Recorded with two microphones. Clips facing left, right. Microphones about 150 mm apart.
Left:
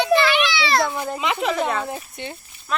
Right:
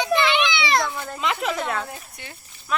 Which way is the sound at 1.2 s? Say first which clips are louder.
Left 1 dB; centre (ahead or behind).